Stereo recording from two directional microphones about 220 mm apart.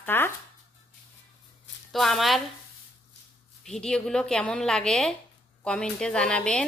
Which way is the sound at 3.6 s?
5° left (ahead or behind).